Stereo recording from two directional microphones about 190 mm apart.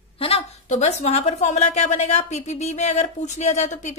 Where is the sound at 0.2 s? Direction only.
30° left (ahead or behind).